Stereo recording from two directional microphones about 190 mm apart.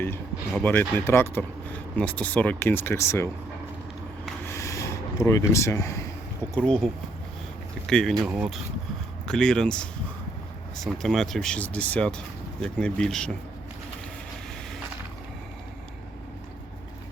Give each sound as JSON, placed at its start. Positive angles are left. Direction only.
{"t": 0.5, "sound": "speech", "side_deg": 10}
{"t": 4.4, "sound": "a sound", "side_deg": 15}
{"t": 6.6, "sound": "speech", "side_deg": 5}
{"t": 7.9, "sound": "speech", "side_deg": 5}
{"t": 11.0, "sound": "speech", "side_deg": 0}